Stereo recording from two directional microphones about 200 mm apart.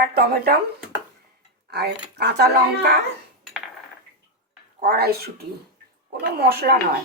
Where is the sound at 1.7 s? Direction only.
55° right (ahead or behind).